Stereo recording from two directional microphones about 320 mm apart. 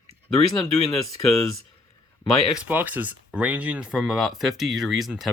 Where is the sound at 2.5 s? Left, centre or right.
Centre.